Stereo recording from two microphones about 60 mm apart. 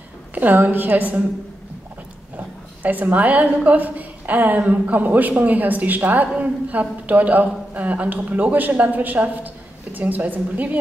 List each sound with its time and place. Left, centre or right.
0.3 s a woman's voice: right
2.3 s a woman's voice: right